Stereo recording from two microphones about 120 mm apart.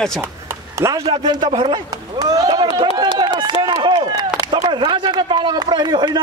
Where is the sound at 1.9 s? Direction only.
30° right (ahead or behind).